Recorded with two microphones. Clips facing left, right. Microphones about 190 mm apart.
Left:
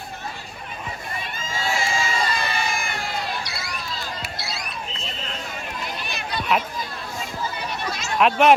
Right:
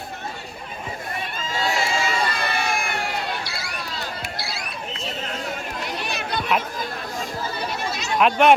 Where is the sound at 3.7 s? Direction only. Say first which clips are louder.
Right 1 dB; 65° right (ahead or behind).